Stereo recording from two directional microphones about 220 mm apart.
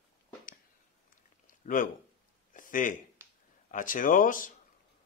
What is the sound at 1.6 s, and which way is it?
Speech, 40° left (ahead or behind).